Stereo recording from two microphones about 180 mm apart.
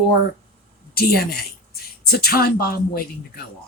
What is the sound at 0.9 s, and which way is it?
Speech, 55° left (ahead or behind).